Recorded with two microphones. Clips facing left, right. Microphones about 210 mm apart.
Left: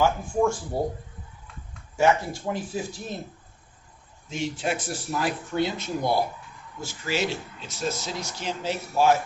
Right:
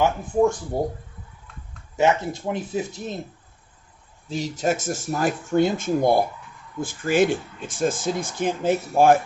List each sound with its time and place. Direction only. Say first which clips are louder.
0.0 s speech: right 3 dB; 20° right (ahead or behind)
2.0 s speech: right 1 dB; 20° right (ahead or behind)
4.3 s speech: right 4 dB; 40° right (ahead or behind)